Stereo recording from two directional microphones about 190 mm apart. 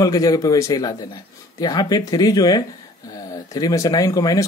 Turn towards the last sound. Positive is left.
turn(degrees=15)  # may be behind; listen again after turning